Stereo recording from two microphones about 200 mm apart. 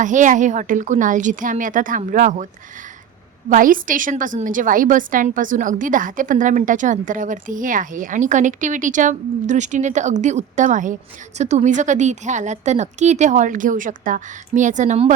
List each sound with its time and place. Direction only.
0.0 s a woman's voice: 40° right (ahead or behind)
3.5 s a woman's voice: 40° right (ahead or behind)